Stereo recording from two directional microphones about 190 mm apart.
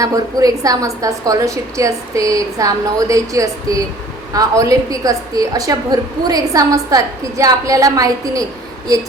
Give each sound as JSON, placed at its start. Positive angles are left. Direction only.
{"t": 0.0, "sound": "a woman's voice", "side_deg": -20}